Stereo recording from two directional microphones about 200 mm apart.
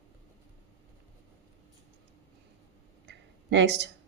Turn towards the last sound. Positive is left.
turn(degrees=-60)  # may be behind; listen again after turning